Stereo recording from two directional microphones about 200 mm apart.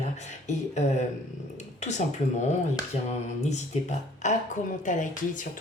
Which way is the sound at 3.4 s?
35° left (ahead or behind).